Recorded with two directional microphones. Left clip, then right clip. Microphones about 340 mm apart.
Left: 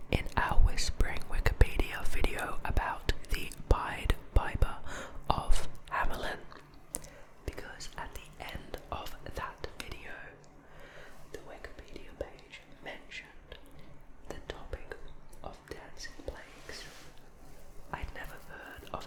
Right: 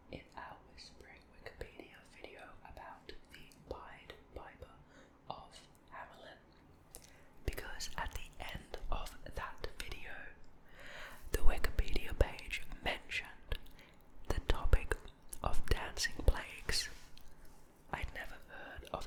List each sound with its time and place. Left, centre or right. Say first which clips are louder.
0.1 s whispering: left 18 dB; left
7.4 s whispering: left 1 dB; centre
10.8 s whispering: right 2 dB; centre
11.3 s whispering: right 6 dB; right
17.9 s whispering: left 2 dB; centre